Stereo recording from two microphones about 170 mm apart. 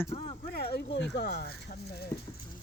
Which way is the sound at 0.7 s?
80° left.